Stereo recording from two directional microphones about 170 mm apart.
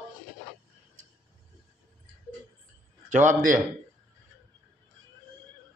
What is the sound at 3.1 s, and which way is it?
Speech, 50° right (ahead or behind).